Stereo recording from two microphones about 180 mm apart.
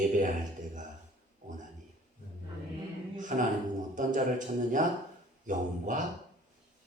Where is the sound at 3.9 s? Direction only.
45° right (ahead or behind).